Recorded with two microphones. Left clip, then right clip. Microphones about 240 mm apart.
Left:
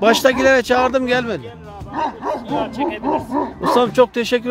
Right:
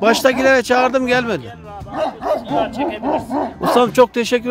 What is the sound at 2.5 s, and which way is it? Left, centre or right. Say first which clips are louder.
Speech: right 2 dB; centre.